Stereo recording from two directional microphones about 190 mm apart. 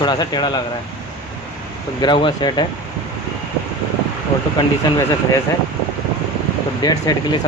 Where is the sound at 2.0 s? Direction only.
25° left (ahead or behind).